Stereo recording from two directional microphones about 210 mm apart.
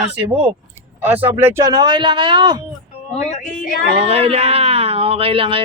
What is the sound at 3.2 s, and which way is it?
Speech, 35° left (ahead or behind).